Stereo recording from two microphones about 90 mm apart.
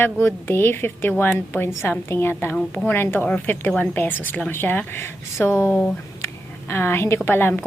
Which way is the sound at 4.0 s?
20° left (ahead or behind).